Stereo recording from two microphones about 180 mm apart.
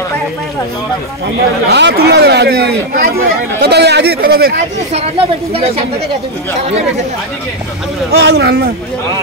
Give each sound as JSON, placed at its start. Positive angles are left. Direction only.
{"t": 1.7, "sound": "speech", "side_deg": -70}
{"t": 4.9, "sound": "a woman's voice", "side_deg": -35}
{"t": 8.1, "sound": "speech", "side_deg": -65}